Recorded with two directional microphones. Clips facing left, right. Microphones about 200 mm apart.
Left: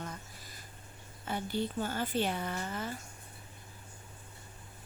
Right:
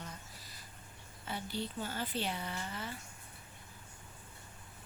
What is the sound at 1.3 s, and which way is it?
Speech, 50° left (ahead or behind).